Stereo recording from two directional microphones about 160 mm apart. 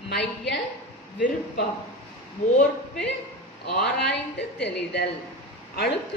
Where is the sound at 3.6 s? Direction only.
90° left.